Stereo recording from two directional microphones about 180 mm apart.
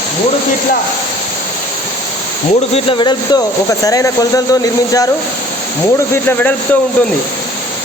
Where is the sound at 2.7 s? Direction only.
30° left (ahead or behind).